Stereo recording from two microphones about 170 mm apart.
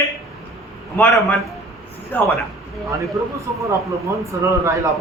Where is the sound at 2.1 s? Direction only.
10° left (ahead or behind).